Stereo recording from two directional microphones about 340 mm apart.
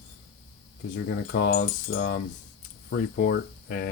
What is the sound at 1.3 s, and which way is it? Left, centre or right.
Speech, left.